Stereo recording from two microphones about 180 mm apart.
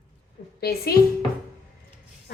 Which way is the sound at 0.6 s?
60° left (ahead or behind).